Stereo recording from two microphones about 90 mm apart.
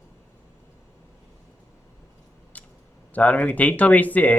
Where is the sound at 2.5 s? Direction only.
15° left (ahead or behind).